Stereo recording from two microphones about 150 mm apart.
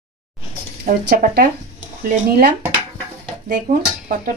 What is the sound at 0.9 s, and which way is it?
Speech, 85° right.